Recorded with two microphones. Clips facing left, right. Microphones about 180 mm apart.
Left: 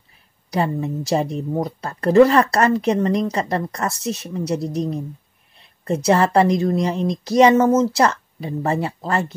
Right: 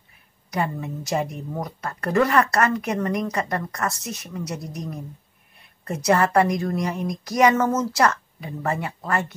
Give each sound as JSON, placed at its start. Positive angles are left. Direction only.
{"t": 0.5, "sound": "a woman's voice", "side_deg": 30}